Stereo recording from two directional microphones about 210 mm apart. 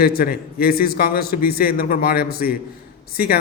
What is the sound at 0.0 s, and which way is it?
Speech, 45° left (ahead or behind).